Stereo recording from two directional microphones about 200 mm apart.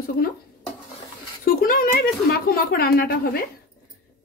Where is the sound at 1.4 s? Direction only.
45° left (ahead or behind).